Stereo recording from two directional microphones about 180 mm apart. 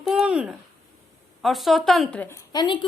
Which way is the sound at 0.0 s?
5° right (ahead or behind).